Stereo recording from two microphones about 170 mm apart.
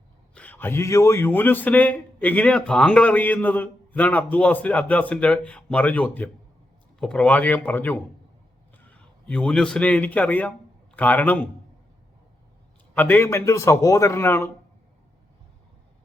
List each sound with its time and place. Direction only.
0.3 s a man's voice: 10° left (ahead or behind)
12.9 s a man's voice: 10° left (ahead or behind)